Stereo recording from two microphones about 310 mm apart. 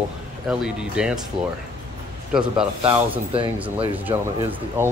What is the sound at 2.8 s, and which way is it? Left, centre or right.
Speech, centre.